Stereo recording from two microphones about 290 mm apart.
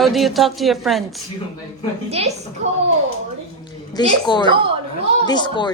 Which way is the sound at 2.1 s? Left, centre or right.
Right.